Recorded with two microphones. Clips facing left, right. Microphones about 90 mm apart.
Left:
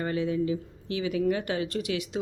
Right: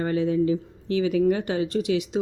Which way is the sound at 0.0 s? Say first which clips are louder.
Right 5 dB; 35° right (ahead or behind).